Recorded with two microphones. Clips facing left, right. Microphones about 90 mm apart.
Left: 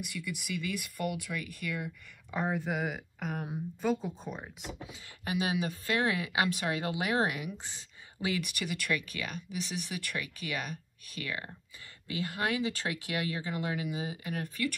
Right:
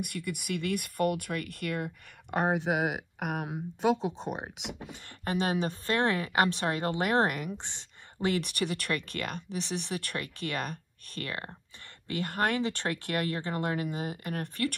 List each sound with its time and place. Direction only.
0.0 s speech: 55° right (ahead or behind)
2.3 s speech: 75° right (ahead or behind)
5.2 s a woman's voice: 40° right (ahead or behind)